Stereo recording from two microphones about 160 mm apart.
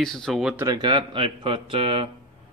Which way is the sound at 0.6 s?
25° right (ahead or behind).